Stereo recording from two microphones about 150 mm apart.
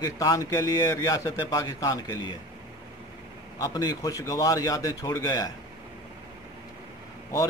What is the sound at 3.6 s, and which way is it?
A man's voice, 25° left (ahead or behind).